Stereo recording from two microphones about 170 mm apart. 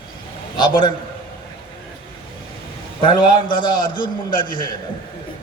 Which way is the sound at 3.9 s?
55° left (ahead or behind).